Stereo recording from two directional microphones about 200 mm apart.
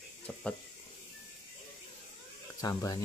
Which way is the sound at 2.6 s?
15° left (ahead or behind).